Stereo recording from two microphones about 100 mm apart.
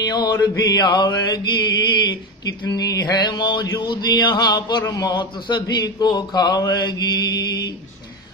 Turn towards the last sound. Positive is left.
turn(degrees=40)  # may be behind; listen again after turning